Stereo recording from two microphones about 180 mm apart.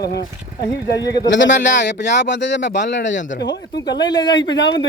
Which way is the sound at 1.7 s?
70° left (ahead or behind).